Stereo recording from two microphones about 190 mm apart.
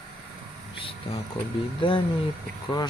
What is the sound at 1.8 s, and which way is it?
Speech, 25° left (ahead or behind).